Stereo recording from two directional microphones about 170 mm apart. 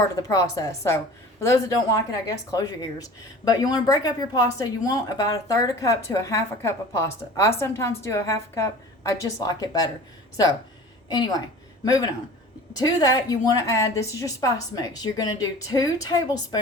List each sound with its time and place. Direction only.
0.2 s speech: 20° left (ahead or behind)
11.1 s speech: 20° left (ahead or behind)
12.7 s speech: 20° left (ahead or behind)